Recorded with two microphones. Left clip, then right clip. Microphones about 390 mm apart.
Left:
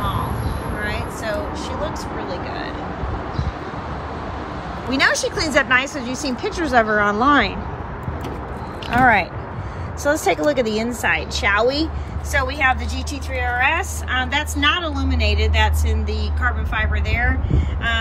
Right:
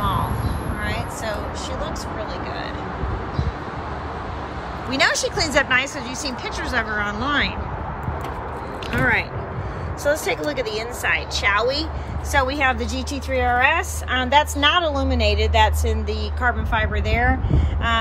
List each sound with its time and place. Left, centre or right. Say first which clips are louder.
0.8 s vehicle: left 1 dB; centre
4.9 s speech: left 1 dB; centre
8.9 s a woman's voice: left 6 dB; centre